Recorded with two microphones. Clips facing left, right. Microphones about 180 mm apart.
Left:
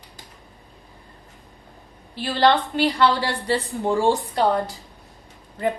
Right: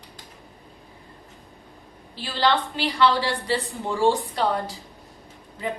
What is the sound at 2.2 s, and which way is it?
Speech, 50° left (ahead or behind).